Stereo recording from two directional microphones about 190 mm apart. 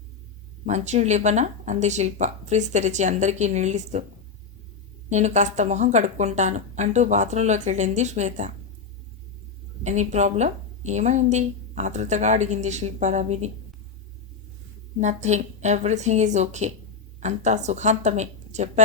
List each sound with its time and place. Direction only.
0.6 s a woman's voice: 35° right (ahead or behind)
5.0 s a woman's voice: 40° right (ahead or behind)
9.8 s a woman's voice: 40° right (ahead or behind)
14.9 s a woman's voice: 35° right (ahead or behind)